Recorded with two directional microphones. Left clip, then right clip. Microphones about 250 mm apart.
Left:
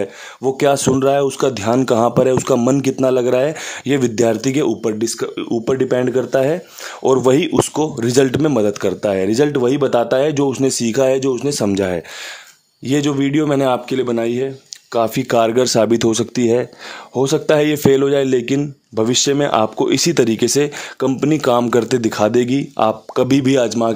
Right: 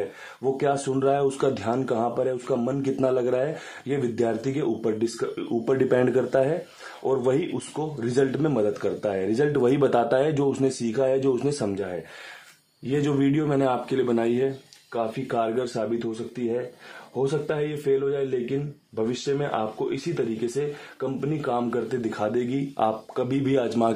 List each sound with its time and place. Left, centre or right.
0.4 s a man's voice: left
12.8 s a man's voice: left
14.9 s a man's voice: left